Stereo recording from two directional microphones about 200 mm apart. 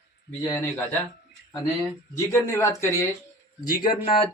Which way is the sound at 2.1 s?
15° left (ahead or behind).